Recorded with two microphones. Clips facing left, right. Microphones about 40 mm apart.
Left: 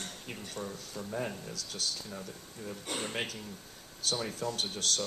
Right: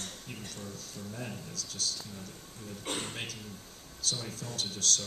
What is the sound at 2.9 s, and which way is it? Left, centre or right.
Speech, left.